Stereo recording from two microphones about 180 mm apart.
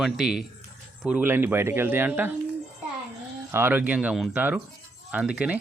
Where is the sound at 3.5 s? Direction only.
10° right (ahead or behind).